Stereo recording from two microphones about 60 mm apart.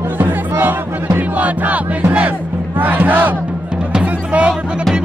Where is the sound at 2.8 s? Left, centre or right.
Right.